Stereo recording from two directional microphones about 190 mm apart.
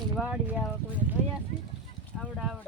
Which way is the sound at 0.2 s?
5° right (ahead or behind).